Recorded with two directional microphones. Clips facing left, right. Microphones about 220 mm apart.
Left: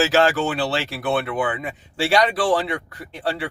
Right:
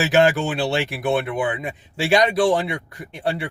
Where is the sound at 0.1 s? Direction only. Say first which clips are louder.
Right 1 dB; 15° right (ahead or behind).